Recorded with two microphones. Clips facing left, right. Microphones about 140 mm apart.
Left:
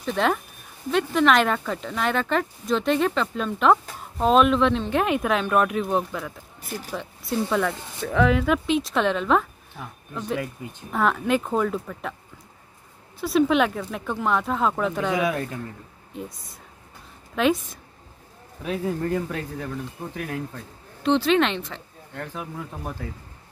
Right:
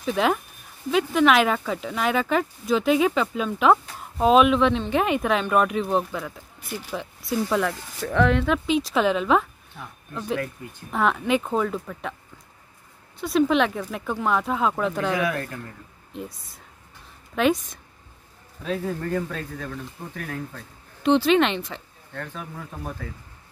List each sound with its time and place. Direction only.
0.0 s speech: 5° right (ahead or behind)
10.9 s speech: centre (ahead or behind)
13.2 s speech: centre (ahead or behind)
15.1 s speech: 20° left (ahead or behind)
17.4 s speech: centre (ahead or behind)
18.6 s a man's voice: 10° left (ahead or behind)
21.0 s speech: 5° right (ahead or behind)
22.1 s a man's voice: 15° left (ahead or behind)